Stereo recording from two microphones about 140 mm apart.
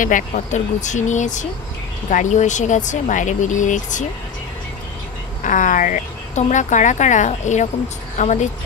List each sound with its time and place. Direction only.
0.0 s speech: 65° left (ahead or behind)
5.4 s speech: 65° left (ahead or behind)